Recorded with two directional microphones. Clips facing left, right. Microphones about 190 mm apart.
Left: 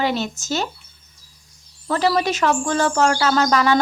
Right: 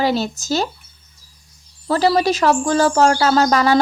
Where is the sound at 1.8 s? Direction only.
35° right (ahead or behind).